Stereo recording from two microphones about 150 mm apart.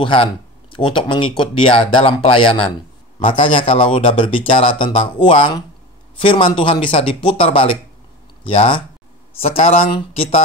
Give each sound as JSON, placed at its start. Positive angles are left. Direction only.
{"t": 0.0, "sound": "speech", "side_deg": 35}